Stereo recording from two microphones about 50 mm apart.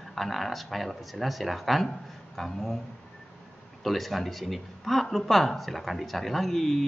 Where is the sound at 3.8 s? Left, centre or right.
Centre.